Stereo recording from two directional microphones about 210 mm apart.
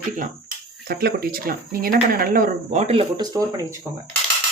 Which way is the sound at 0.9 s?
45° right (ahead or behind).